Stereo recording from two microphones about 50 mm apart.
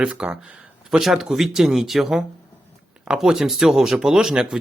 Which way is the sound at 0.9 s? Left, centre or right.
Centre.